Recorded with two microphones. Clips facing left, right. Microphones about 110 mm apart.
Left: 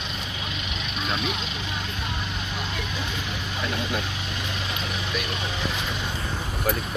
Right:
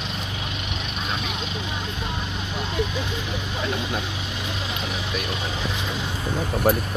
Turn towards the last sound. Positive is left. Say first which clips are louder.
# right 6 dB
turn(degrees=-45)  # may be behind; listen again after turning